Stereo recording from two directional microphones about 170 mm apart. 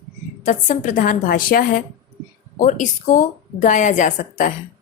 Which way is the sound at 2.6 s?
45° left (ahead or behind).